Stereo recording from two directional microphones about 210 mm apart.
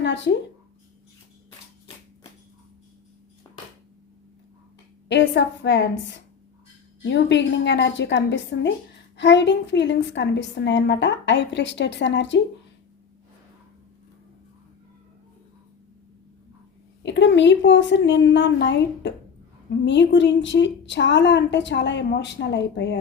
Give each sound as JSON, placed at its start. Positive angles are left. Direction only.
{"t": 0.0, "sound": "a sound", "side_deg": 55}
{"t": 5.0, "sound": "a woman's voice", "side_deg": 55}
{"t": 17.0, "sound": "a woman's voice", "side_deg": 55}